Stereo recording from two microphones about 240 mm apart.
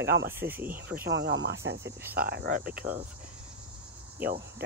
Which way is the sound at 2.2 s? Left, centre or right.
Right.